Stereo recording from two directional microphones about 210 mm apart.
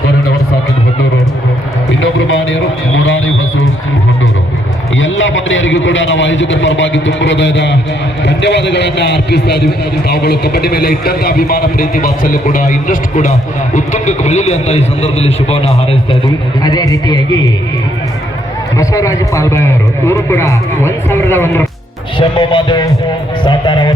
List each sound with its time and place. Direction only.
2.0 s music: 65° left (ahead or behind)
4.9 s a man's voice: 65° left (ahead or behind); by 17.2 s 15° left (ahead or behind)
18.8 s a man's voice: 15° left (ahead or behind)
22.2 s speech: 25° left (ahead or behind)
23.4 s a sound: 25° left (ahead or behind)